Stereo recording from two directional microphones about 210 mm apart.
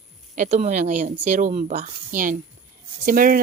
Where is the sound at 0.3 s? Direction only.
35° right (ahead or behind).